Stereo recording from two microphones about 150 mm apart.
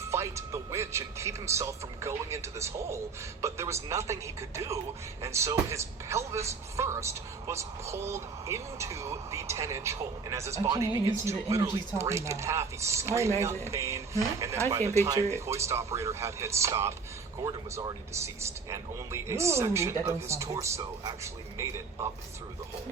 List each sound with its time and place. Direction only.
0.0 s speech: 20° right (ahead or behind)